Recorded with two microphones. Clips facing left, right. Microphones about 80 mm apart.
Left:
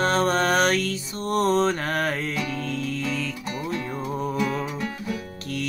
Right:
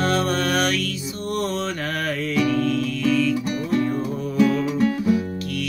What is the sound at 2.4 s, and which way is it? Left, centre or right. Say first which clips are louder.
Music: right 9 dB; right.